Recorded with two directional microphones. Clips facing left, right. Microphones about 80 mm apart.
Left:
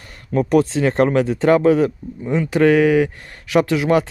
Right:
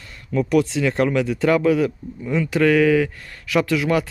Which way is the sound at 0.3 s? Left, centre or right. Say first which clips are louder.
Left 3 dB; left.